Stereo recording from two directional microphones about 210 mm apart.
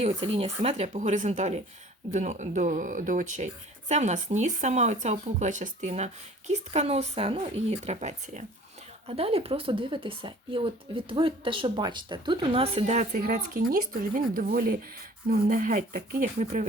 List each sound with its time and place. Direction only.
0.0 s speech: 30° right (ahead or behind)